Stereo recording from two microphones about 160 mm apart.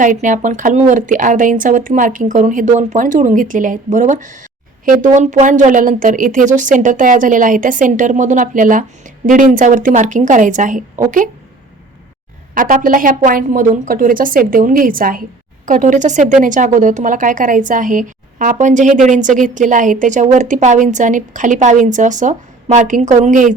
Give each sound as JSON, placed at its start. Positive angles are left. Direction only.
{"t": 0.0, "sound": "a woman's voice", "side_deg": -55}
{"t": 12.5, "sound": "a woman's voice", "side_deg": -60}